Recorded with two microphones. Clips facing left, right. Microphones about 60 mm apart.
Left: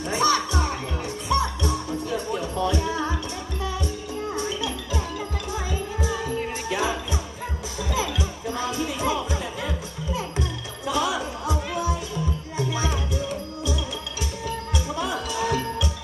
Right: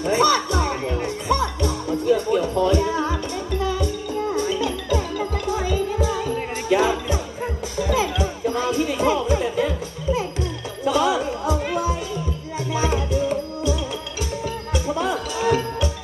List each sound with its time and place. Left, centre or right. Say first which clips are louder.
0.0 s music: right 4 dB; right
6.7 s jingle bell: right 9 dB; right
7.8 s music: right 6 dB; right